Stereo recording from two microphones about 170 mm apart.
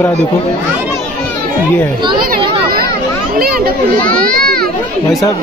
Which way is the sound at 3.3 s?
60° right (ahead or behind).